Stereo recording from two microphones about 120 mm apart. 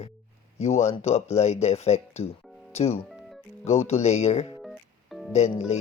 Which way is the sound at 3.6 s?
60° left (ahead or behind).